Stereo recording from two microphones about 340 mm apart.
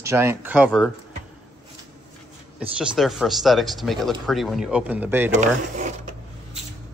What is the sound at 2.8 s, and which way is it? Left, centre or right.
Speech, centre.